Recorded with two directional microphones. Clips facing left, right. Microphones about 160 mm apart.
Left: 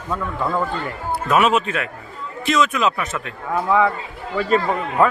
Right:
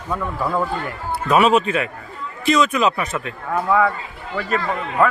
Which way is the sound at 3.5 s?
15° left (ahead or behind).